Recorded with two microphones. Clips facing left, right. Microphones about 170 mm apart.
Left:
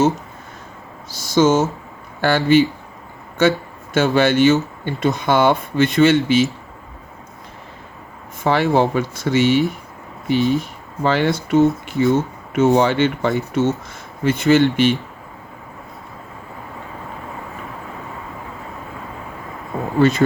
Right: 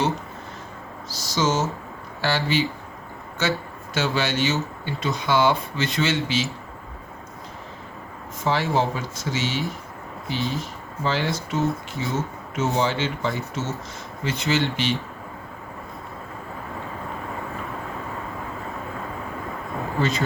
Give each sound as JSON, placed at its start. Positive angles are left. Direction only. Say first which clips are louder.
{"t": 1.1, "sound": "speech", "louder": "left 9 dB", "side_deg": 55}
{"t": 3.9, "sound": "speech", "louder": "left 9 dB", "side_deg": 50}
{"t": 8.4, "sound": "speech", "louder": "left 6 dB", "side_deg": 60}
{"t": 20.0, "sound": "speech", "louder": "left 10 dB", "side_deg": 55}